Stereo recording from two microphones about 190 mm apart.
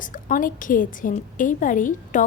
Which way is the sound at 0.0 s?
45° left (ahead or behind).